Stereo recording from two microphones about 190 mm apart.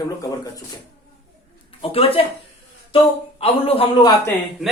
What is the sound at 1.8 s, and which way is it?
Speech, 30° left (ahead or behind).